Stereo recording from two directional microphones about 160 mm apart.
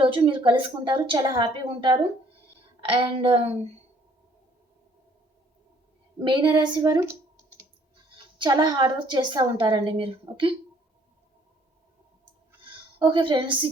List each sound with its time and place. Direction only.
0.0 s a woman's voice: 30° right (ahead or behind)
6.2 s a woman's voice: 30° right (ahead or behind)
8.4 s a woman's voice: 30° right (ahead or behind)
12.6 s a woman's voice: 30° right (ahead or behind)